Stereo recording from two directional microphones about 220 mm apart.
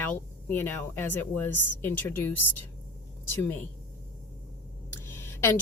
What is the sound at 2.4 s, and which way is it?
Speech, 90° left.